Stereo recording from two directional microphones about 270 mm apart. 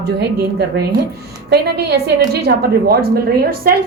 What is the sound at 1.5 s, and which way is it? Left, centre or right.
A woman's voice, right.